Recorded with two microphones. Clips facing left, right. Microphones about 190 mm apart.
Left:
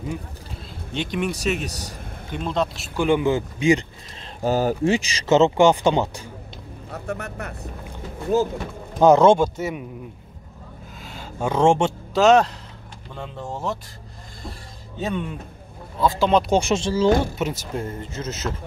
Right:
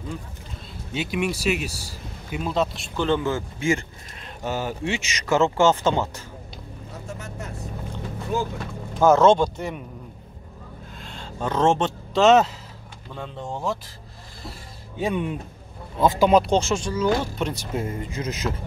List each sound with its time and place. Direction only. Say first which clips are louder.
0.9 s speech: even; 5° right (ahead or behind)
3.1 s speech: left 4 dB; 15° left (ahead or behind)
4.2 s speech: left 7 dB; 35° left (ahead or behind); by 6.2 s 15° left (ahead or behind)
6.9 s speech: left 7 dB; 60° left (ahead or behind)
8.3 s speech: left 6 dB; 40° left (ahead or behind)
9.0 s speech: left 2 dB; 15° left (ahead or behind)
11.0 s a sound: left 3 dB; 5° left (ahead or behind)
12.1 s a man's voice: even; centre (ahead or behind)
15.0 s speech: right 2 dB; 15° right (ahead or behind)
16.4 s speech: left 1 dB; 10° left (ahead or behind)
16.7 s speech: left 4 dB; 25° left (ahead or behind)
17.2 s speech: left 2 dB; 5° left (ahead or behind)
17.8 s speech: right 1 dB; 10° right (ahead or behind)